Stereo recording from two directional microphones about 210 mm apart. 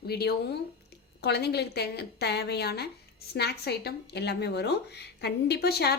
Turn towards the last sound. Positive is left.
turn(degrees=50)  # may be behind; listen again after turning